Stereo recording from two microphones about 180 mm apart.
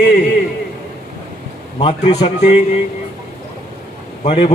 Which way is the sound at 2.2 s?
40° left (ahead or behind).